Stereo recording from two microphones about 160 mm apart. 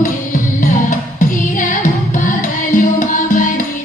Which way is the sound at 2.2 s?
55° left (ahead or behind).